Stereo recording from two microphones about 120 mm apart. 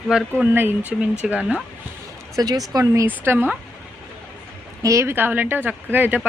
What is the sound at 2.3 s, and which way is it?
Speech, 30° right (ahead or behind).